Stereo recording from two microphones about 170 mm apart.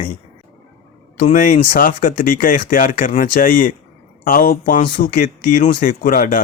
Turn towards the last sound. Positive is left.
turn(degrees=55)  # may be behind; listen again after turning